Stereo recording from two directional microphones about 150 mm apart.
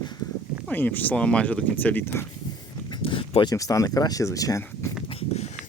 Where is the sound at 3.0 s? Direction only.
35° left (ahead or behind).